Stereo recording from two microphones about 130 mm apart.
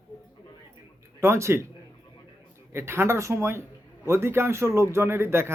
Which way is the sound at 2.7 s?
20° right (ahead or behind).